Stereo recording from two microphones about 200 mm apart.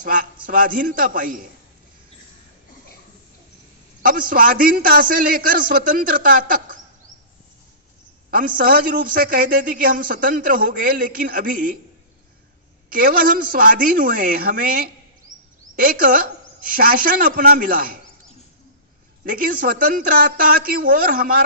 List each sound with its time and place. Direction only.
0.5 s a man's voice: 45° right (ahead or behind)
4.0 s a man's voice: 45° right (ahead or behind)
8.3 s a man's voice: 45° right (ahead or behind)
12.9 s a man's voice: 45° right (ahead or behind)
19.2 s a man's voice: 45° right (ahead or behind)